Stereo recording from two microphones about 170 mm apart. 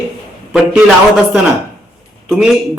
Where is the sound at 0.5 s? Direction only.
5° right (ahead or behind).